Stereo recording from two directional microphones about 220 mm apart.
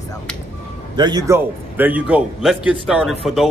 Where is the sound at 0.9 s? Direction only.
20° right (ahead or behind).